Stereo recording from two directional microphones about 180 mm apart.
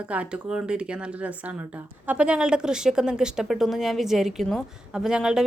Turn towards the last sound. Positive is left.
turn(degrees=-5)  # may be behind; listen again after turning